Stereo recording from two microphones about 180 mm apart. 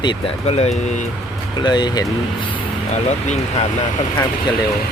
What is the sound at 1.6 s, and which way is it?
Speech, 25° left (ahead or behind).